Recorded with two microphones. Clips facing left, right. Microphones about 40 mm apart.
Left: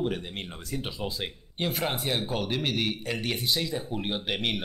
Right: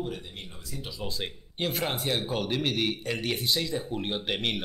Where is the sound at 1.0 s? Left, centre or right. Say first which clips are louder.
Left 1 dB; centre.